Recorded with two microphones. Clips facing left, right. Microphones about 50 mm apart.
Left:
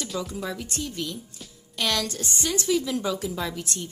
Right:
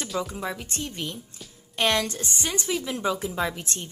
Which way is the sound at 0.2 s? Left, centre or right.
Right.